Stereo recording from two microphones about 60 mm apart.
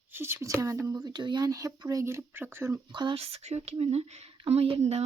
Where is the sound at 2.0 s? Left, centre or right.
Right.